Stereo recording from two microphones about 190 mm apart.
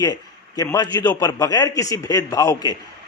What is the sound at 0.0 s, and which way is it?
A man's voice, 20° left (ahead or behind).